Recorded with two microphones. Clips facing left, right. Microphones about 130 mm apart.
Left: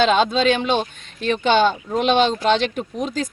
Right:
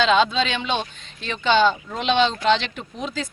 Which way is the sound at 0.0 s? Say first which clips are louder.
Left 2 dB; 45° left (ahead or behind).